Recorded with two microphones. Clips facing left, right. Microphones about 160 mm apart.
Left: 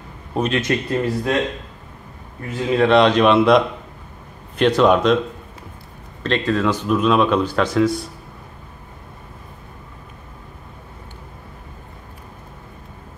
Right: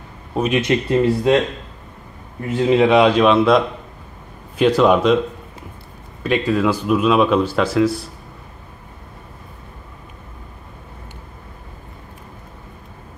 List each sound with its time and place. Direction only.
0.3 s a man's voice: centre (ahead or behind)
0.7 s speech: 25° right (ahead or behind)
2.7 s a man's voice: 15° right (ahead or behind)
6.2 s a man's voice: 10° right (ahead or behind)